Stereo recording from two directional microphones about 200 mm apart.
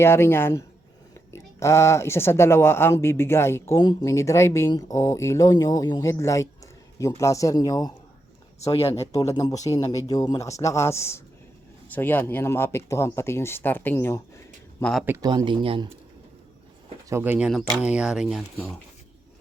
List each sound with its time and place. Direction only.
0.0 s speech: 10° left (ahead or behind)
9.1 s speech: 20° left (ahead or behind)
15.0 s speech: 15° right (ahead or behind)
17.1 s speech: 10° right (ahead or behind)